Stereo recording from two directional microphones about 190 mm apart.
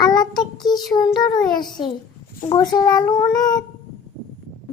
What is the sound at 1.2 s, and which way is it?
A child's voice, 20° left (ahead or behind).